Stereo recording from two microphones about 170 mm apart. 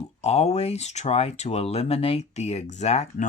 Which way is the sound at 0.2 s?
40° left (ahead or behind).